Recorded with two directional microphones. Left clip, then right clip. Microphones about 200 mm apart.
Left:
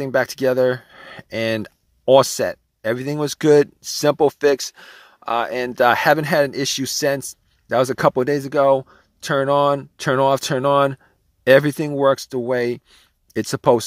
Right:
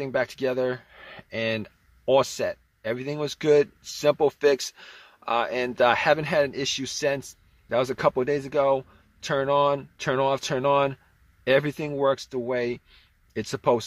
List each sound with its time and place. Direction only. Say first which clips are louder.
0.0 s speech: left 7 dB; 45° left (ahead or behind)